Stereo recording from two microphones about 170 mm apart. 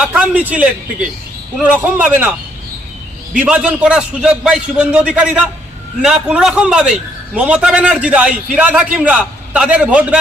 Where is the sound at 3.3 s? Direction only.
5° right (ahead or behind).